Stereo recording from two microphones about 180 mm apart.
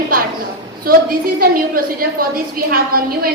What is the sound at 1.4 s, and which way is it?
A woman's voice, 55° right (ahead or behind).